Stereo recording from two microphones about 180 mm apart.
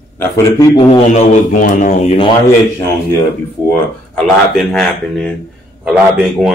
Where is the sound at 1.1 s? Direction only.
45° left (ahead or behind).